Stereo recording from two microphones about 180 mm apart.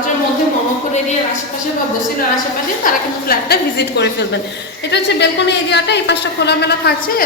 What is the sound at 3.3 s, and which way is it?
A man's voice, 65° left (ahead or behind).